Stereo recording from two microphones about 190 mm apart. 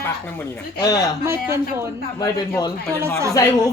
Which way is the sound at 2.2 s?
20° left (ahead or behind).